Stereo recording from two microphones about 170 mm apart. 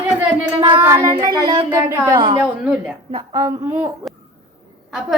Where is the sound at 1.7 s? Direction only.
15° right (ahead or behind).